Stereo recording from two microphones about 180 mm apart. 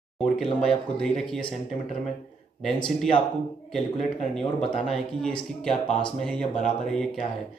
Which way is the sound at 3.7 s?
5° left (ahead or behind).